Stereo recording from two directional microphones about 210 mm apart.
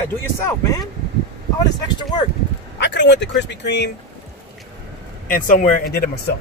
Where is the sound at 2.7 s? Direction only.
55° left (ahead or behind).